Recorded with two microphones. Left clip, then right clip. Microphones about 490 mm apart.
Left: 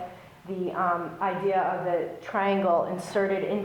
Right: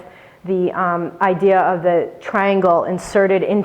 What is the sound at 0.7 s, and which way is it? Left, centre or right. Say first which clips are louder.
A woman's voice: right 8 dB; right.